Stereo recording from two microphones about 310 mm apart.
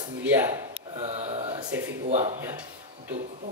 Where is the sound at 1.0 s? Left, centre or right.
Centre.